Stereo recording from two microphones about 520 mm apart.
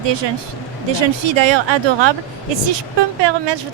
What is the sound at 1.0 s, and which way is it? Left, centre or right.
Speech, right.